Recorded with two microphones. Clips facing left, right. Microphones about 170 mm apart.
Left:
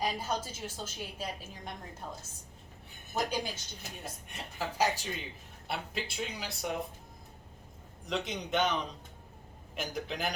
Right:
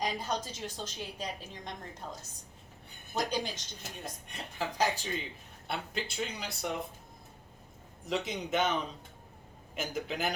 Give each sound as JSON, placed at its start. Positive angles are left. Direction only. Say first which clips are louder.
{"t": 0.0, "sound": "a woman's voice", "louder": "even", "side_deg": 5}
{"t": 3.1, "sound": "a woman's voice", "louder": "even", "side_deg": 5}
{"t": 8.0, "sound": "speech", "louder": "right 1 dB", "side_deg": -5}